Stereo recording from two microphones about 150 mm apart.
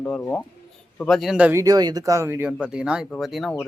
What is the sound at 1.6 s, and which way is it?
Speech, 25° right (ahead or behind).